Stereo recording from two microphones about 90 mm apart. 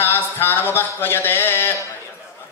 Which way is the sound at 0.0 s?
25° left (ahead or behind).